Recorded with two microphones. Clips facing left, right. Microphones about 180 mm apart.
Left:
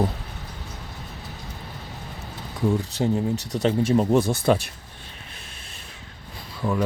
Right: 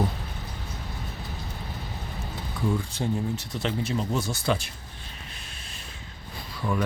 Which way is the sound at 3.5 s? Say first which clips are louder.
Left 10 dB; 40° left (ahead or behind).